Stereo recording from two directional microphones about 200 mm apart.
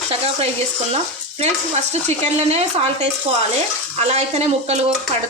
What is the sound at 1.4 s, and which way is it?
Speech, 35° right (ahead or behind).